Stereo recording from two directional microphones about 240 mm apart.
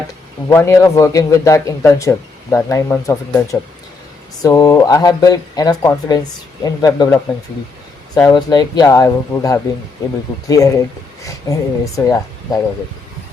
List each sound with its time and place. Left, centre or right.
0.4 s a man's voice: centre